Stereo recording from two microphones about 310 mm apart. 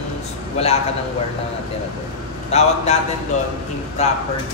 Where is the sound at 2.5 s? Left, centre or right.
Left.